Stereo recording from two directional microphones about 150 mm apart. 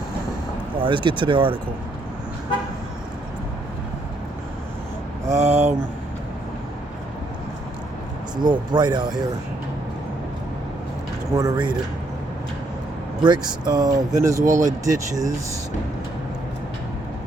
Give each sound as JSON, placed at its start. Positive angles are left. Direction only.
{"t": 0.8, "sound": "speech", "side_deg": -35}
{"t": 5.5, "sound": "speech", "side_deg": -50}
{"t": 8.4, "sound": "speech", "side_deg": -30}
{"t": 11.3, "sound": "speech", "side_deg": -20}
{"t": 13.2, "sound": "speech", "side_deg": -30}
{"t": 14.4, "sound": "speech", "side_deg": -55}
{"t": 14.9, "sound": "speech", "side_deg": -20}